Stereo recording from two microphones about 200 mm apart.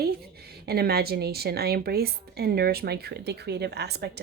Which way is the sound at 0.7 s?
50° right (ahead or behind).